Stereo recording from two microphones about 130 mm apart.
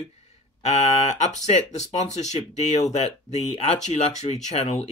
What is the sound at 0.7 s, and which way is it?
Speech, 60° left (ahead or behind).